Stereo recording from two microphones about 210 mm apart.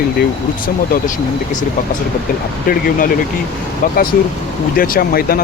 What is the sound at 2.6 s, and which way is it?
Speech, 45° left (ahead or behind).